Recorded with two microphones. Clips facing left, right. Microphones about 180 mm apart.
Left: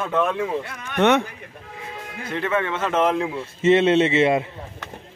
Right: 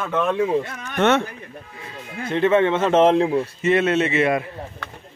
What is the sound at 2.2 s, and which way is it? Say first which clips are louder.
Speech: right 7 dB; 25° right (ahead or behind).